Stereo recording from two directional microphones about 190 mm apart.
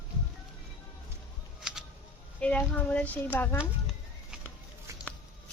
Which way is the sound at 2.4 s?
5° left (ahead or behind).